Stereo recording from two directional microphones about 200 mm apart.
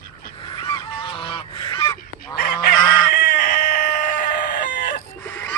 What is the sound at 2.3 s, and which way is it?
Chicken, 45° left (ahead or behind).